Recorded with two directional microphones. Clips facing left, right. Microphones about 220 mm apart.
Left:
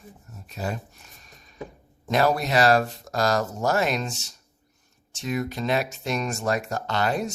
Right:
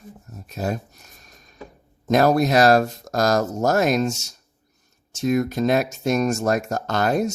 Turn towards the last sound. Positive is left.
turn(degrees=-45)  # may be behind; listen again after turning